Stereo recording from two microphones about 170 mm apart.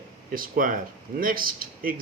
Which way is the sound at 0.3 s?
55° right (ahead or behind).